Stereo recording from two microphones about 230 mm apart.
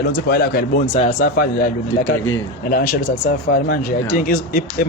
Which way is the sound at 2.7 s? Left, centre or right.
Left.